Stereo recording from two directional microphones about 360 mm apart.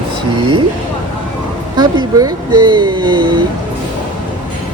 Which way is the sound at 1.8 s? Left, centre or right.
Centre.